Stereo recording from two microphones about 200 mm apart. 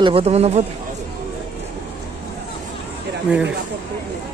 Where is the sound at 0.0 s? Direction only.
30° right (ahead or behind).